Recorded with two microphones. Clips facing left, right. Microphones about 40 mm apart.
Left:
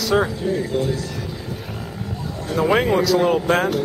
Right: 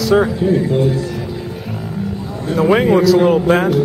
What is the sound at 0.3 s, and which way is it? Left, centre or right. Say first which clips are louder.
Speech: right 7 dB; centre.